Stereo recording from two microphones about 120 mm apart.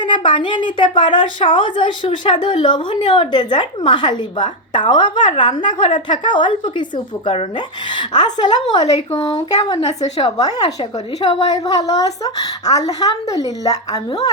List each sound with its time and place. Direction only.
0.0 s a woman's voice: 40° left (ahead or behind)
11.2 s a woman's voice: 45° left (ahead or behind)
11.5 s a woman's voice: 30° left (ahead or behind)